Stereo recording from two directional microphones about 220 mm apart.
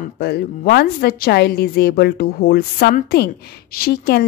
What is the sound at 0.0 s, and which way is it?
A woman's voice, 45° left (ahead or behind).